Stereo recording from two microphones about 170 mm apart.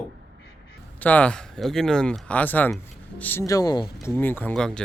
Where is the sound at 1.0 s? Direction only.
10° left (ahead or behind).